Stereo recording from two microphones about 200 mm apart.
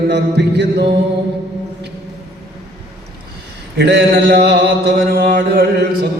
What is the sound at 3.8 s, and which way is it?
Mantra, 55° right (ahead or behind).